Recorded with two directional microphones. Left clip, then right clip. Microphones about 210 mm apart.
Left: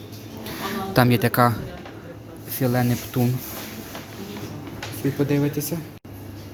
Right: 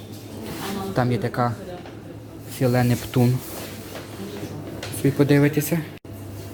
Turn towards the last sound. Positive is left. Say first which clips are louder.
# right 4 dB
turn(degrees=-10)  # may be behind; listen again after turning